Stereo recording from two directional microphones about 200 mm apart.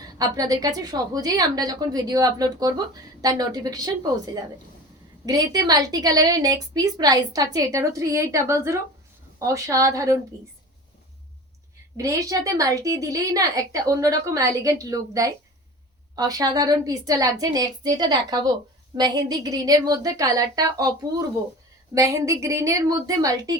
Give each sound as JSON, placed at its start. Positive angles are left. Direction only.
{"t": 0.0, "sound": "a woman's voice", "side_deg": -20}
{"t": 5.2, "sound": "a woman's voice", "side_deg": -20}
{"t": 11.9, "sound": "a woman's voice", "side_deg": -15}